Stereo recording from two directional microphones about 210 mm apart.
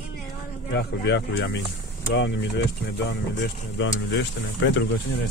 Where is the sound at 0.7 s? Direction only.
55° left (ahead or behind).